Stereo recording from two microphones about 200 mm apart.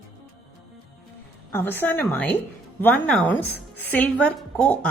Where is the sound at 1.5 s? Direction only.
10° left (ahead or behind).